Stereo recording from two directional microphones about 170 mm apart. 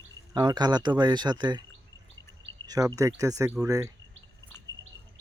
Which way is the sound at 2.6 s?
20° right (ahead or behind).